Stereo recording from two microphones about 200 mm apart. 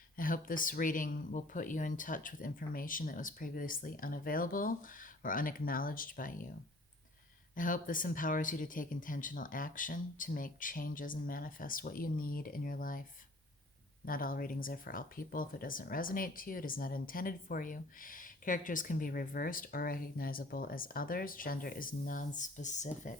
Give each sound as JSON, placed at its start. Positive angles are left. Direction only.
{"t": 0.2, "sound": "speech", "side_deg": 45}
{"t": 7.5, "sound": "speech", "side_deg": 40}